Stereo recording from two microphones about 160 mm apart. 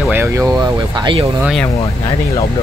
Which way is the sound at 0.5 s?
30° right (ahead or behind).